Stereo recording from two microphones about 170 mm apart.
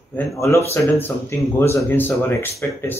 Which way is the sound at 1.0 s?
15° left (ahead or behind).